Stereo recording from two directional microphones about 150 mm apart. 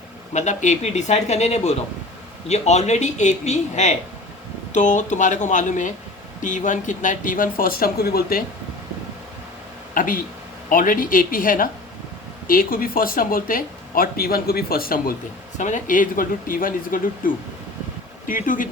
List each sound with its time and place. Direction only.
0.3 s a man's voice: 55° left (ahead or behind); by 8.4 s 85° left
9.9 s speech: 65° left (ahead or behind)
15.5 s speech: 55° left (ahead or behind)